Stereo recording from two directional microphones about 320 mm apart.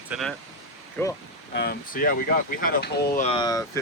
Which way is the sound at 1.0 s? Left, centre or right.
Centre.